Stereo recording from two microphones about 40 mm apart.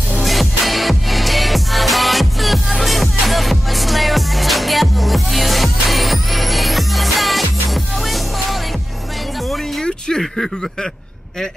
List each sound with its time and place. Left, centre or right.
0.2 s music: centre
9.5 s music: centre